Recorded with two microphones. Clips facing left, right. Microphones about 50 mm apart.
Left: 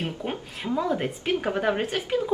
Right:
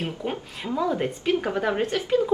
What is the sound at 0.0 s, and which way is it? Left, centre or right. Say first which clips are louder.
A woman's voice: right 1 dB; centre.